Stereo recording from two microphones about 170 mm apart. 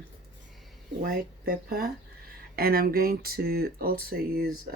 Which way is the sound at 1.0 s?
60° right (ahead or behind).